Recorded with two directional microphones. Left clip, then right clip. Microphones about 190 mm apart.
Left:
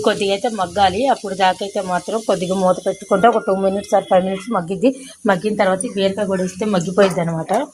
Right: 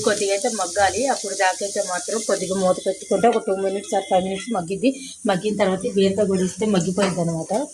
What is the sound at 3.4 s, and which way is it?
Speech, 5° left (ahead or behind).